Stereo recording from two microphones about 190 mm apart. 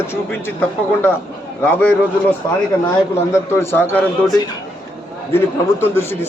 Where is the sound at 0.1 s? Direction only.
10° left (ahead or behind).